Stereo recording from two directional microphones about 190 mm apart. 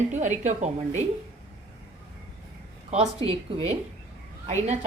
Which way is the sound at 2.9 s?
35° right (ahead or behind).